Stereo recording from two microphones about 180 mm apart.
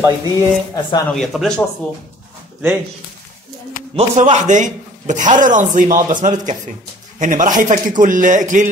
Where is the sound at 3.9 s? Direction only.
40° right (ahead or behind).